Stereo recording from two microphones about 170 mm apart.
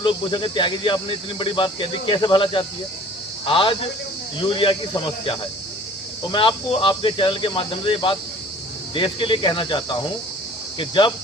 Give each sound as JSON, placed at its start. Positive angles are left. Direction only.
{"t": 0.0, "sound": "a man's voice", "side_deg": 30}